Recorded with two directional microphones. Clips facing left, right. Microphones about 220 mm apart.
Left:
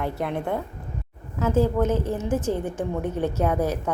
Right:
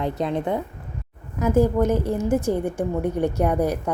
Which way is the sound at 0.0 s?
20° right (ahead or behind).